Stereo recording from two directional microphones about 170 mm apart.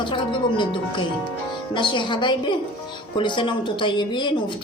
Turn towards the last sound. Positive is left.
turn(degrees=25)  # may be behind; listen again after turning